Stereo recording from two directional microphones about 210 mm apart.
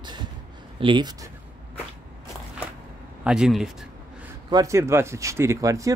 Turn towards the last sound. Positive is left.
turn(degrees=-15)  # may be behind; listen again after turning